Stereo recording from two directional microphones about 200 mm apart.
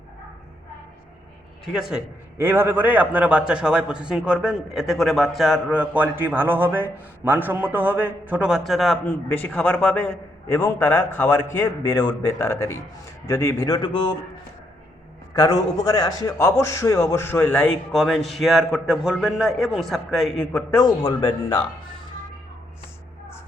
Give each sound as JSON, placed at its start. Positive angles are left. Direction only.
{"t": 1.7, "sound": "a man's voice", "side_deg": -5}
{"t": 15.3, "sound": "a man's voice", "side_deg": 15}
{"t": 20.5, "sound": "a man's voice", "side_deg": 15}